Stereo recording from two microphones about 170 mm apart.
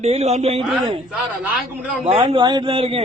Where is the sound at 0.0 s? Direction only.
35° right (ahead or behind).